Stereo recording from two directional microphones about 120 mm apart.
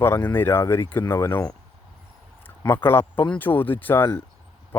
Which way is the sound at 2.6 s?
20° left (ahead or behind).